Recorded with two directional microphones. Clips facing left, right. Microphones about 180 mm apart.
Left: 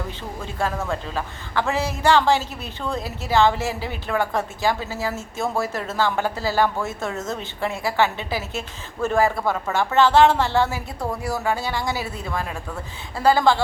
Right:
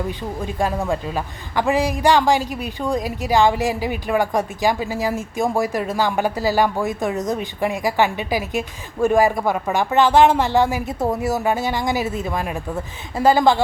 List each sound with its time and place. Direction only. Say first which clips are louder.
0.4 s a man's voice: right 4 dB; 15° right (ahead or behind)